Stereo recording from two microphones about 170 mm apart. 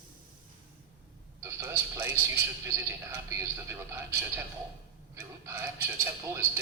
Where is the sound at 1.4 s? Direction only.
15° right (ahead or behind).